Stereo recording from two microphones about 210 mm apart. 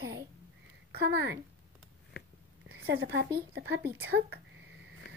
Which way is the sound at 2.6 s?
55° right (ahead or behind).